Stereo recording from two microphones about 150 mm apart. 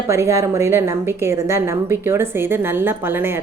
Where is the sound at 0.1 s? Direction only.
20° right (ahead or behind).